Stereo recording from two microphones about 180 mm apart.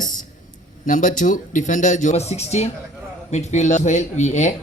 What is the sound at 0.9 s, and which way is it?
Speech, 45° left (ahead or behind).